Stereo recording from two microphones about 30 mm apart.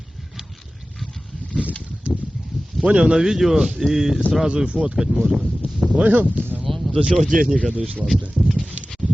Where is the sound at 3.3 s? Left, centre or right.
Centre.